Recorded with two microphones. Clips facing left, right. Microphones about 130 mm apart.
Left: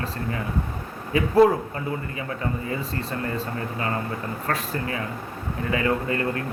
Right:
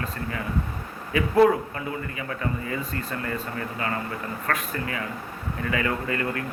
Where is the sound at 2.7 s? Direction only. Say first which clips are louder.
Left 2 dB; 30° left (ahead or behind).